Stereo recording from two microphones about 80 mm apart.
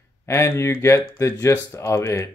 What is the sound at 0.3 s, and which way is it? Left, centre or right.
Speech, left.